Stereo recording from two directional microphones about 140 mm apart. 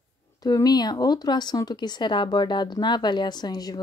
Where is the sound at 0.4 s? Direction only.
25° left (ahead or behind).